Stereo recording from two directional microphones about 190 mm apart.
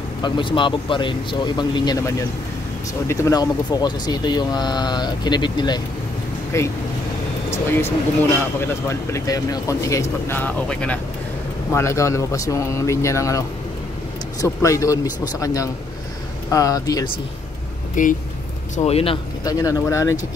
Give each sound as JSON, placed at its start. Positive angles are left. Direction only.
{"t": 0.2, "sound": "speech", "side_deg": 25}
{"t": 14.4, "sound": "speech", "side_deg": 15}
{"t": 18.0, "sound": "speech", "side_deg": 45}
{"t": 18.8, "sound": "speech", "side_deg": 30}
{"t": 19.4, "sound": "speech", "side_deg": 20}